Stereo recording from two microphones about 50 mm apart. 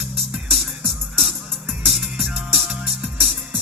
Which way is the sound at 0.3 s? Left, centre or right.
Centre.